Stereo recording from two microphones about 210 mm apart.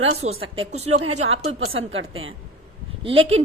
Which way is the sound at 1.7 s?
70° right (ahead or behind).